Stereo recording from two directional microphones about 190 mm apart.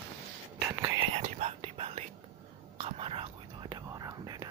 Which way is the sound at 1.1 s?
35° right (ahead or behind).